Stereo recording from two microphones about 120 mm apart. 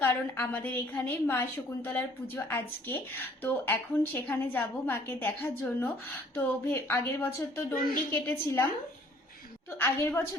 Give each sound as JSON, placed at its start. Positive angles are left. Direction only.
{"t": 0.0, "sound": "a woman's voice", "side_deg": 20}
{"t": 9.7, "sound": "a woman's voice", "side_deg": 20}